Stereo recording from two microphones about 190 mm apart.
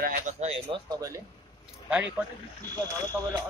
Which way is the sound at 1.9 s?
5° right (ahead or behind).